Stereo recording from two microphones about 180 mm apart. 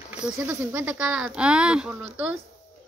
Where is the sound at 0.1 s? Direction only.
10° right (ahead or behind).